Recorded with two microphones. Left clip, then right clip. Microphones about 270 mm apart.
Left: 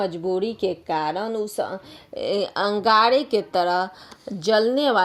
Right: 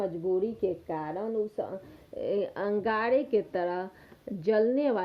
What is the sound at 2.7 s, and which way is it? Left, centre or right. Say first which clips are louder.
Speech: left 11 dB; centre.